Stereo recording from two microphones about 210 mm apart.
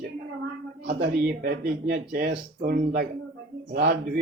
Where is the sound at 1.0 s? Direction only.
45° right (ahead or behind).